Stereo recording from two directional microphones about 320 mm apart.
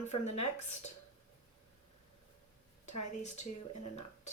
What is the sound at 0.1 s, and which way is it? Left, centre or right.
Speech, centre.